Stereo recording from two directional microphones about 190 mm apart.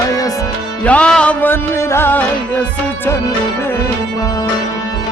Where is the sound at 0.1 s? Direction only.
20° left (ahead or behind).